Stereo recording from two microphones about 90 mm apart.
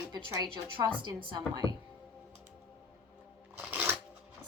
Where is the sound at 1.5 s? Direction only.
45° right (ahead or behind).